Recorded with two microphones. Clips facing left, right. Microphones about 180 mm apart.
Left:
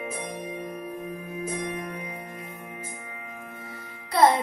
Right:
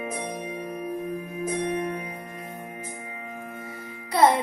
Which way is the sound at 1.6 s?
40° right (ahead or behind).